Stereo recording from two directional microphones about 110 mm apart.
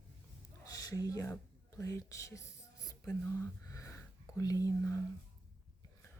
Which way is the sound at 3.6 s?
30° left (ahead or behind).